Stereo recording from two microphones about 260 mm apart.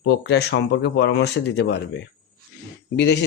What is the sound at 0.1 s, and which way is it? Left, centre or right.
Speech, left.